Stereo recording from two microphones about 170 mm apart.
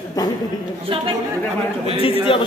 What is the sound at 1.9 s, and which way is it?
Speech, 35° left (ahead or behind).